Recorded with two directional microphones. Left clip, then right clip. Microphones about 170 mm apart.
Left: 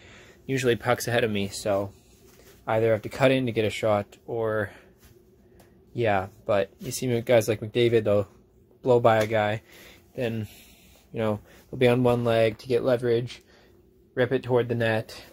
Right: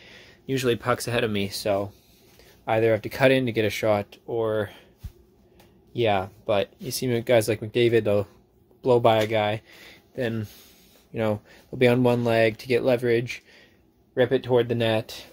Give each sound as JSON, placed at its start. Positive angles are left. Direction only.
{"t": 0.0, "sound": "a sound", "side_deg": -15}
{"t": 1.1, "sound": "speech", "side_deg": -15}
{"t": 5.9, "sound": "speech", "side_deg": -20}